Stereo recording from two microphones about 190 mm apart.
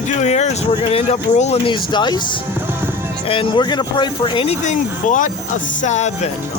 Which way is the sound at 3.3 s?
25° left (ahead or behind).